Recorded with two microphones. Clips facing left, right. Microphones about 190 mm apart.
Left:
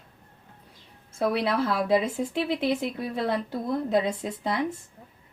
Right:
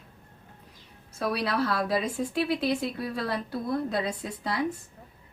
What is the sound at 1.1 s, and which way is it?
A woman's voice, 25° left (ahead or behind).